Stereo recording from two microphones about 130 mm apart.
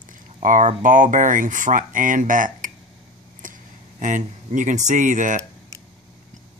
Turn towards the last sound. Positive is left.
turn(degrees=-75)  # may be behind; listen again after turning